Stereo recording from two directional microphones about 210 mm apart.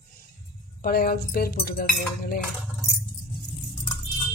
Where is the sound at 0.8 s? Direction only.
45° left (ahead or behind).